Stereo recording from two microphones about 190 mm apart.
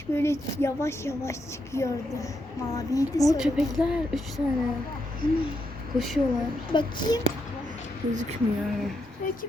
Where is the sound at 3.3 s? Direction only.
5° right (ahead or behind).